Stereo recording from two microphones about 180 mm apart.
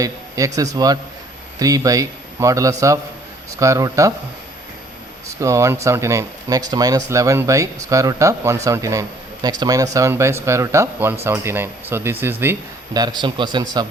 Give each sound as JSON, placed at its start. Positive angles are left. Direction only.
{"t": 0.0, "sound": "a man's voice", "side_deg": -20}
{"t": 5.4, "sound": "a man's voice", "side_deg": -15}